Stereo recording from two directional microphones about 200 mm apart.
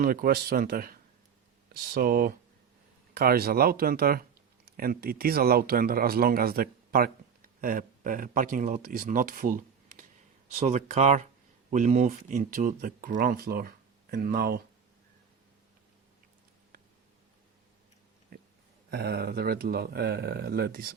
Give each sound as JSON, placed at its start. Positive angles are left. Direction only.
{"t": 0.0, "sound": "speech", "side_deg": -50}
{"t": 18.9, "sound": "speech", "side_deg": -55}